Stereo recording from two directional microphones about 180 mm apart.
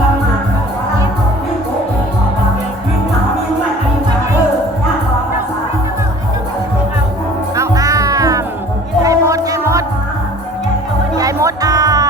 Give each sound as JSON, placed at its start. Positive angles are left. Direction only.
{"t": 7.5, "sound": "music", "side_deg": -20}
{"t": 11.2, "sound": "music", "side_deg": -20}